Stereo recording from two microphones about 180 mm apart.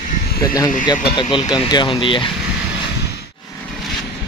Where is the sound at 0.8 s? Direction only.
25° left (ahead or behind).